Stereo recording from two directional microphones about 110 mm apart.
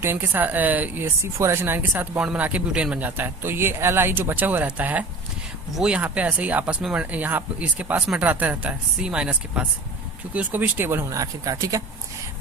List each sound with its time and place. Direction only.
0.0 s speech: 20° right (ahead or behind)
11.2 s speech: 30° right (ahead or behind)